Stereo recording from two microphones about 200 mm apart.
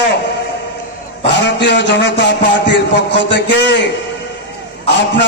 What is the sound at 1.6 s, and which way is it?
A man's voice, 60° left (ahead or behind).